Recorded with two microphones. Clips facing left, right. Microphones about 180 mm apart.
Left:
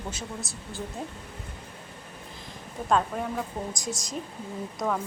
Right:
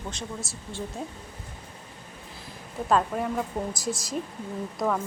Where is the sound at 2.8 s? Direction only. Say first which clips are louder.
Right 1 dB; centre (ahead or behind).